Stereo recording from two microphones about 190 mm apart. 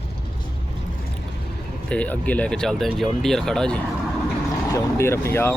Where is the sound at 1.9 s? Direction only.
5° left (ahead or behind).